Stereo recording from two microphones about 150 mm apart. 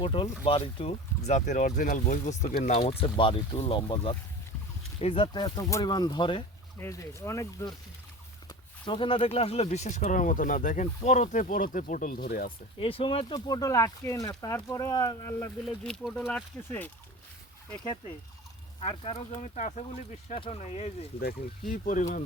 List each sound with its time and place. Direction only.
0.0 s speech: 35° left (ahead or behind); by 2.9 s 50° left (ahead or behind)
3.0 s speech: 35° left (ahead or behind)
6.7 s speech: 20° left (ahead or behind)
8.4 s speech: 35° left (ahead or behind); by 12.5 s 80° left
12.8 s speech: 40° left (ahead or behind); by 15.5 s 20° left (ahead or behind)
15.6 s speech: 5° left (ahead or behind)
18.8 s speech: 40° left (ahead or behind)
21.7 s speech: 60° left (ahead or behind)